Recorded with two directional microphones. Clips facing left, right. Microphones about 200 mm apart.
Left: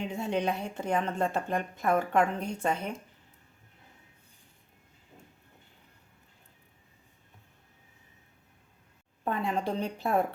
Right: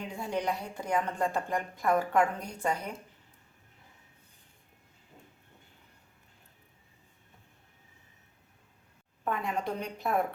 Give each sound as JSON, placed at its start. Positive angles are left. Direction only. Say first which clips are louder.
{"t": 0.0, "sound": "a woman's voice", "louder": "left 3 dB", "side_deg": 25}
{"t": 9.2, "sound": "a woman's voice", "louder": "left 2 dB", "side_deg": 30}